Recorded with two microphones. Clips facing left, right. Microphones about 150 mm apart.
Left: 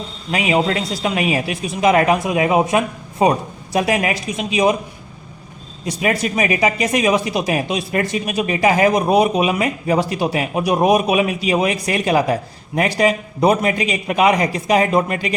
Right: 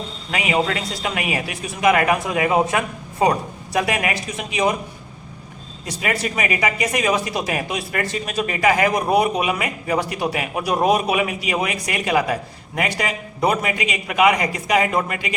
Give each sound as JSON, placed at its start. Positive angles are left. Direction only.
{"t": 0.3, "sound": "a man's voice", "side_deg": 25}
{"t": 5.8, "sound": "a man's voice", "side_deg": 20}